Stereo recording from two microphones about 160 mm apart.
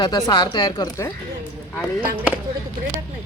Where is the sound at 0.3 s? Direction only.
25° left (ahead or behind).